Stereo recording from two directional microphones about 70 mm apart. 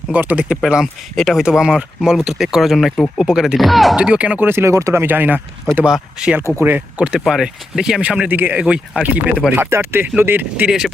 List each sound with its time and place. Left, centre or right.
0.1 s speech: right
0.6 s speech: centre
3.9 s speech: centre
4.4 s speech: right
4.7 s speech: right
5.0 s speech: right
5.8 s speech: centre
6.6 s speech: right
7.0 s speech: centre
8.3 s speech: right
8.5 s speech: centre
9.6 s speech: right
10.7 s speech: centre